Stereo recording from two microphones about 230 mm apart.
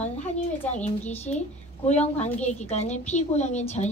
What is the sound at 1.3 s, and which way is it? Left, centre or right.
Speech, left.